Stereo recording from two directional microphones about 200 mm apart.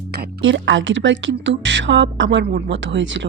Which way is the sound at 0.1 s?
55° right (ahead or behind).